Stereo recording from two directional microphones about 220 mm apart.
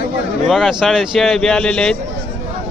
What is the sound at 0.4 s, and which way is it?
A man's voice, centre (ahead or behind).